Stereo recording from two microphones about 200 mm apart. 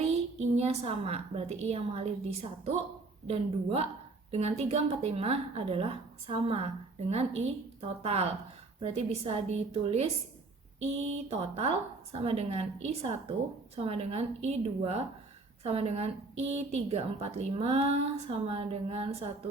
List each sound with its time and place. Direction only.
0.3 s a woman's voice: 30° right (ahead or behind)
11.3 s a woman's voice: 30° right (ahead or behind)